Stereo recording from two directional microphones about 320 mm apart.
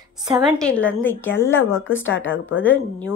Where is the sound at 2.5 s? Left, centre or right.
Centre.